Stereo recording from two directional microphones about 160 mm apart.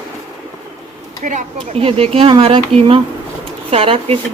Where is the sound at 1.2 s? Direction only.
50° right (ahead or behind).